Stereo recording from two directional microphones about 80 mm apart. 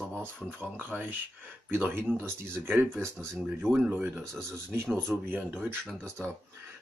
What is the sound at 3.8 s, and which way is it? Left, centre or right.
Speech, right.